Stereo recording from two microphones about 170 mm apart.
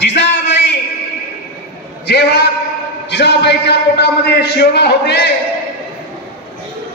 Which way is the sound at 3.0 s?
90° left.